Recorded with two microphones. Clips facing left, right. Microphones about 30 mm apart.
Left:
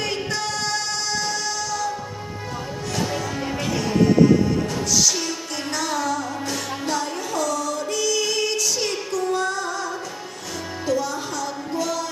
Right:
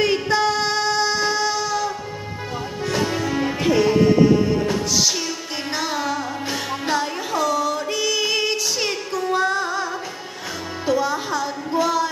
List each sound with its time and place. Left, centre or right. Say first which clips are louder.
0.0 s music: right 7 dB; right
10.9 s music: right 4 dB; centre